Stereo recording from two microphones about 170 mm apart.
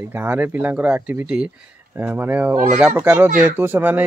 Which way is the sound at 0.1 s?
10° right (ahead or behind).